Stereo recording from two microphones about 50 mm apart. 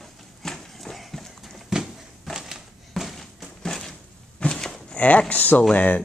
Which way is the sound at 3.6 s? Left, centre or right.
Centre.